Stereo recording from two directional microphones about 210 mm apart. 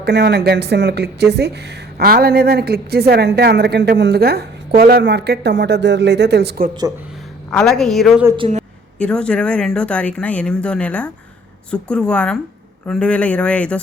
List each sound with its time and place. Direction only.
0.0 s a woman's voice: 55° right (ahead or behind)
7.5 s speech: centre (ahead or behind)
8.4 s speech: 30° right (ahead or behind)
9.0 s speech: 5° left (ahead or behind)